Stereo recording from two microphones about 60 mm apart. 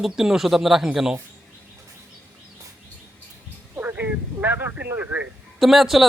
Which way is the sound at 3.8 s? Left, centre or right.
Right.